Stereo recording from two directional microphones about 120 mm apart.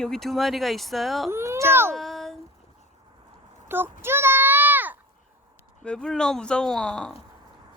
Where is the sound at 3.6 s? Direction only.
15° right (ahead or behind).